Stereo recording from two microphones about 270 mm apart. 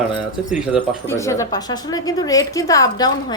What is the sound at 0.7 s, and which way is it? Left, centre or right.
Speech, centre.